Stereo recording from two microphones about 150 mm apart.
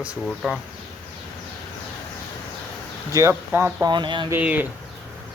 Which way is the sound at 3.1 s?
15° right (ahead or behind).